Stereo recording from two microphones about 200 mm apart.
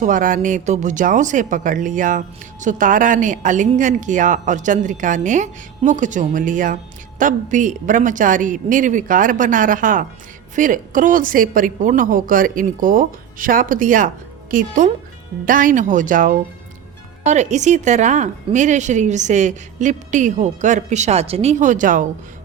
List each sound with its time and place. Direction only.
0.0 s a woman's voice: 40° right (ahead or behind)